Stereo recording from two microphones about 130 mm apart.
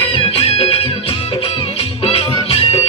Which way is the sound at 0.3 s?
50° left (ahead or behind).